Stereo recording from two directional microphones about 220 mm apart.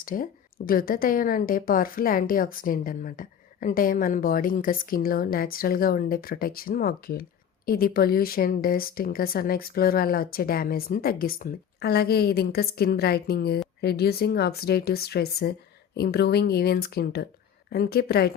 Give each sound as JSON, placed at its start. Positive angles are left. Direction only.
{"t": 0.0, "sound": "a woman's voice", "side_deg": 40}